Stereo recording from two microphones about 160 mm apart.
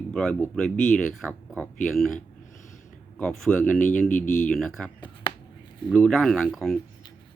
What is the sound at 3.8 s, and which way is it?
Speech, 55° left (ahead or behind).